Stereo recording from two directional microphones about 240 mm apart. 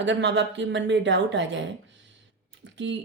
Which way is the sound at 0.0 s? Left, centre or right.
Right.